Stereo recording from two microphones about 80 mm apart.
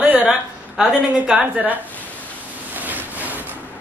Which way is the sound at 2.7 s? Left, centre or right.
Right.